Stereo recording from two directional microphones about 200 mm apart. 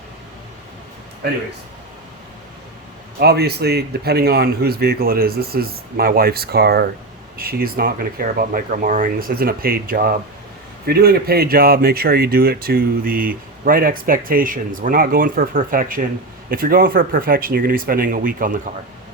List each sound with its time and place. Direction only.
3.2 s speech: 55° right (ahead or behind)